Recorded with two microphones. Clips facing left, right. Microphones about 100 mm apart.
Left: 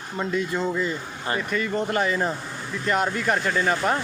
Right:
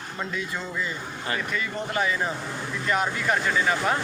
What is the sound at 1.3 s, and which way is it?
Speech, 40° left (ahead or behind).